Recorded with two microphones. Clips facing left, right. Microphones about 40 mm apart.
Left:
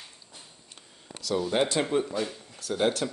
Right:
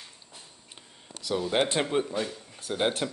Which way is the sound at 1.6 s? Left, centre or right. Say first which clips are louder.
Even; right.